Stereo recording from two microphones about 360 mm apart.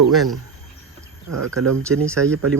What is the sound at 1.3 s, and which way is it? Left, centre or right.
Speech, right.